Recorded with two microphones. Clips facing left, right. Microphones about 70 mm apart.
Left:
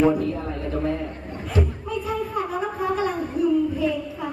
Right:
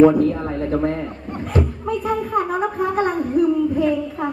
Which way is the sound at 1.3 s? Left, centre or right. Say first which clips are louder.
Right 4 dB; right.